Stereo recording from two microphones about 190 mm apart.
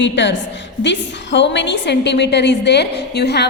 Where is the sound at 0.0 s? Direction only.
70° left (ahead or behind).